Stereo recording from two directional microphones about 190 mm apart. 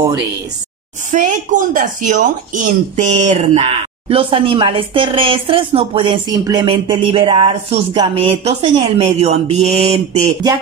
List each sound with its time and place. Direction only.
1.1 s speech: 40° right (ahead or behind)